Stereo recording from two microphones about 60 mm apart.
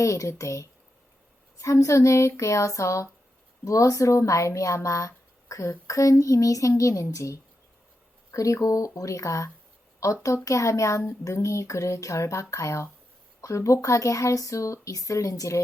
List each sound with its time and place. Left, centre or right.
0.0 s speech: left